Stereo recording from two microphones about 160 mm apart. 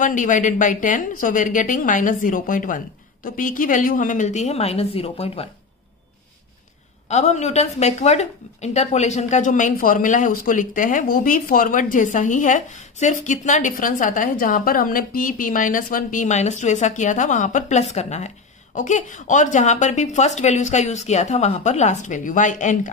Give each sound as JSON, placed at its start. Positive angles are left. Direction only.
{"t": 0.0, "sound": "a woman's voice", "side_deg": 55}
{"t": 7.1, "sound": "a woman's voice", "side_deg": 45}